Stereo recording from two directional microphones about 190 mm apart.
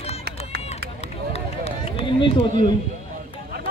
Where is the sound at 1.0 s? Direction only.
35° left (ahead or behind).